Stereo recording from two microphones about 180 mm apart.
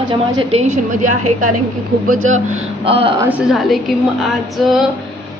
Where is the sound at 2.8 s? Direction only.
30° right (ahead or behind).